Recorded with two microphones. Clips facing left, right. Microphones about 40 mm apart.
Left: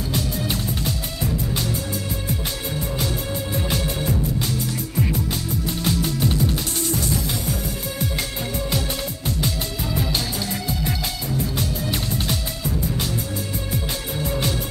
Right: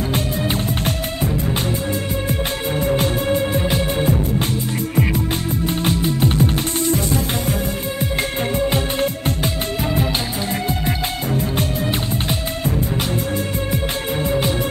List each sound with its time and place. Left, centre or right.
0.1 s music: right
2.8 s music: right
3.6 s music: right
8.5 s music: right
10.7 s music: right
14.2 s music: right